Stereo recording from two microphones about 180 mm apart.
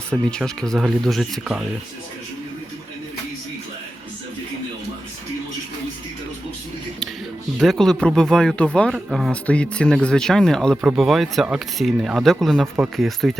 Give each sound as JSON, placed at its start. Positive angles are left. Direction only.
{"t": 0.1, "sound": "speech", "side_deg": 5}
{"t": 7.6, "sound": "speech", "side_deg": 0}